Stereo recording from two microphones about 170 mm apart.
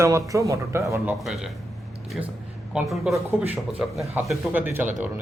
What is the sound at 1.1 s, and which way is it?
Speech, centre (ahead or behind).